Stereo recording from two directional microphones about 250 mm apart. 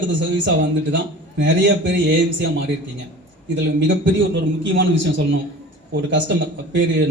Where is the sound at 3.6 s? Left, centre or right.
Right.